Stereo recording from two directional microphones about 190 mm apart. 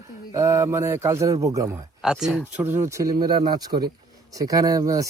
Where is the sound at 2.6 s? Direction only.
10° right (ahead or behind).